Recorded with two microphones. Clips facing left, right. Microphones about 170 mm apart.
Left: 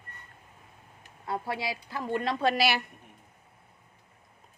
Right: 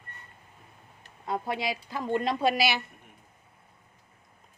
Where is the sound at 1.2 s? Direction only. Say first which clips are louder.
Right 2 dB; 20° right (ahead or behind).